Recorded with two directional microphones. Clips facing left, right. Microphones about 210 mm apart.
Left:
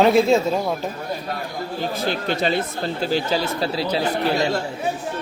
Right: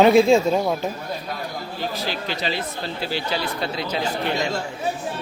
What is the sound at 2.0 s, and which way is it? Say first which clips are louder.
Speech: left 5 dB; 50° left (ahead or behind).